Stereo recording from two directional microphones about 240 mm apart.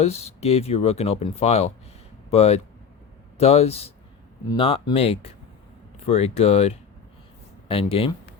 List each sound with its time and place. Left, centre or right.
0.0 s speech: left